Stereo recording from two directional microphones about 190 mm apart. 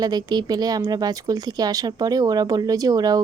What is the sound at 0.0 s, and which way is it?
Speech, 20° right (ahead or behind).